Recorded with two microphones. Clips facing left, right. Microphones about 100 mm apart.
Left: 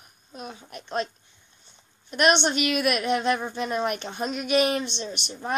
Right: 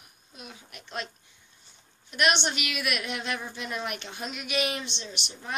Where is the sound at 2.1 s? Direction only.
40° left (ahead or behind).